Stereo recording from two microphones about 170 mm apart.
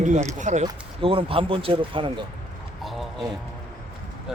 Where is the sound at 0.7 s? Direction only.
30° right (ahead or behind).